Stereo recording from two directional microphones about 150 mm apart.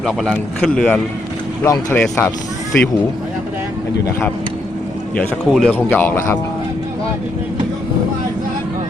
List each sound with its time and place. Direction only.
0.0 s speech: centre (ahead or behind)
1.6 s speech: 15° left (ahead or behind)
5.1 s speech: 5° left (ahead or behind)